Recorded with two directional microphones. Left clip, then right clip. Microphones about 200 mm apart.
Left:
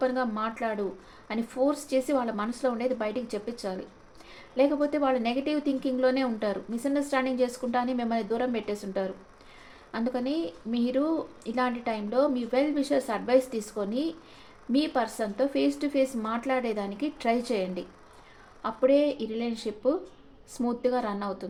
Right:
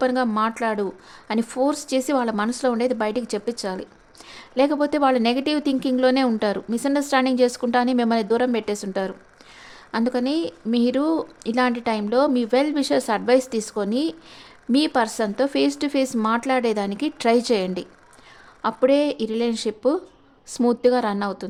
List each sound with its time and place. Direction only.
0.0 s a woman's voice: 50° right (ahead or behind)